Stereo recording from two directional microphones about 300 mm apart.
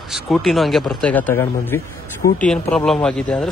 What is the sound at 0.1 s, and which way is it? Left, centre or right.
Speech, centre.